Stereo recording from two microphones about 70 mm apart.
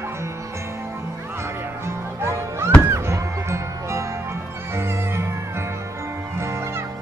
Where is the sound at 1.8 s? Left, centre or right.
Right.